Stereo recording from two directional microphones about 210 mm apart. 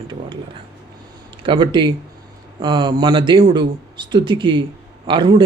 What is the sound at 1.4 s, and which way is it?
Speech, 20° right (ahead or behind).